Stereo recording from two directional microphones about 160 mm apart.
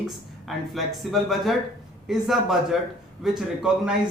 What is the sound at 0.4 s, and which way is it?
Speech, centre (ahead or behind).